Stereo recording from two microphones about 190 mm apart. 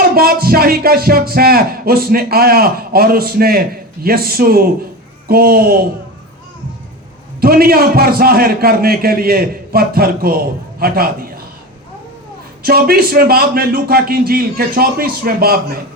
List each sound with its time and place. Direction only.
0.1 s a man's voice: 50° right (ahead or behind)
7.4 s a man's voice: 50° right (ahead or behind)
12.6 s a man's voice: 50° right (ahead or behind)